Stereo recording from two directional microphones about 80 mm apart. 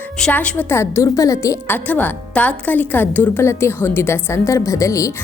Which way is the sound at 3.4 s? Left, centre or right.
Left.